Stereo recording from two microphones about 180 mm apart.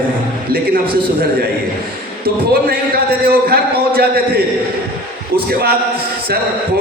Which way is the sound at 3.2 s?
55° right (ahead or behind).